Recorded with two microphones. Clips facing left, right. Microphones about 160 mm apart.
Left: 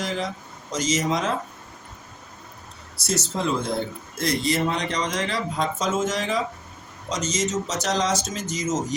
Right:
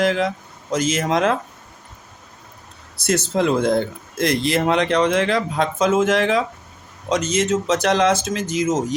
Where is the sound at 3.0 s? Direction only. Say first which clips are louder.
Right 7 dB; 60° right (ahead or behind).